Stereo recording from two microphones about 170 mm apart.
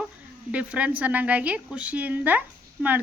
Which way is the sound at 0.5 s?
10° right (ahead or behind).